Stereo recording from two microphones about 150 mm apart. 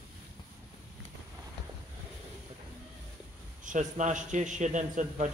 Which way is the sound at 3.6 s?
55° right (ahead or behind).